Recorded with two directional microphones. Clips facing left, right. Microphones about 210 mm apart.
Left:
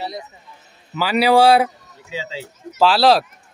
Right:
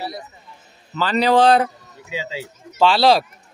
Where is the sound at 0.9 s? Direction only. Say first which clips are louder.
Left 1 dB; 10° left (ahead or behind).